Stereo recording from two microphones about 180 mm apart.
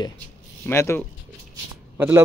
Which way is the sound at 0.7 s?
15° left (ahead or behind).